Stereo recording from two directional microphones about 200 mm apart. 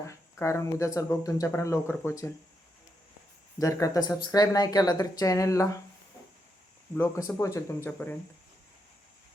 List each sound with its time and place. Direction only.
0.1 s speech: 15° left (ahead or behind)
3.6 s speech: 15° left (ahead or behind)
6.9 s speech: 15° left (ahead or behind)